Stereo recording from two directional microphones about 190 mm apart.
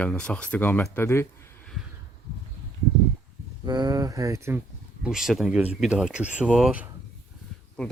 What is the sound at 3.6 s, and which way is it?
Speech, 20° right (ahead or behind).